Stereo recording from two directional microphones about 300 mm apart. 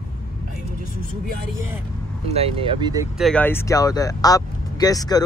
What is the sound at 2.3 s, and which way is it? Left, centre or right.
Speech, centre.